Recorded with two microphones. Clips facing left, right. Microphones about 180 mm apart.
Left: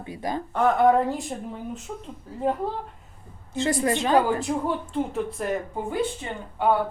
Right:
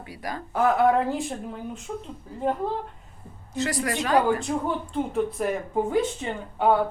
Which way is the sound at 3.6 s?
25° left (ahead or behind).